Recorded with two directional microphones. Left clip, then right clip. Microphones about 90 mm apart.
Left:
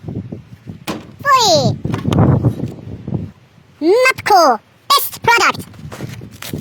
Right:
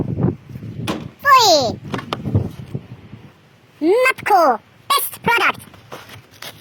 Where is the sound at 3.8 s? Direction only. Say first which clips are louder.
Left 3 dB; 50° left (ahead or behind).